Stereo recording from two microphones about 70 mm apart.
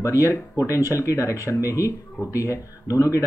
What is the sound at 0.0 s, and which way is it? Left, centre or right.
Speech, left.